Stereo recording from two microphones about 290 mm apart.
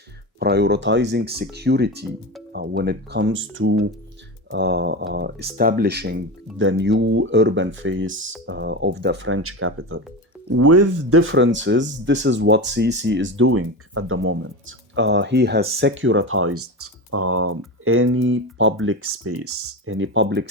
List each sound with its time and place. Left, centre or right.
0.3 s speech: right
10.5 s speech: right